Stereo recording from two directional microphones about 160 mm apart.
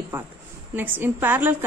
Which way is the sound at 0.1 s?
10° right (ahead or behind).